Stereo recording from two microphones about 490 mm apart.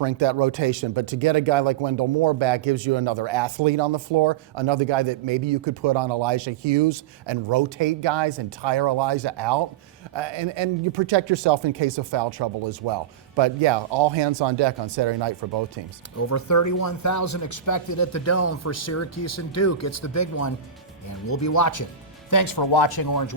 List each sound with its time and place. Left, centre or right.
0.0 s speech: right
16.1 s speech: left